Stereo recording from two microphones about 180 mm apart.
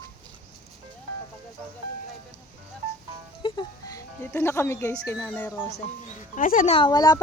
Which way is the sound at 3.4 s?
20° left (ahead or behind).